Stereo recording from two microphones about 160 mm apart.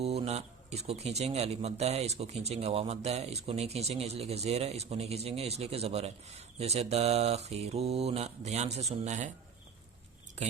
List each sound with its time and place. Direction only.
0.0 s speech: 40° right (ahead or behind)